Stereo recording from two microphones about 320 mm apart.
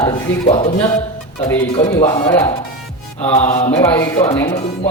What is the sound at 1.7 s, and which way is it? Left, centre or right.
Speech, centre.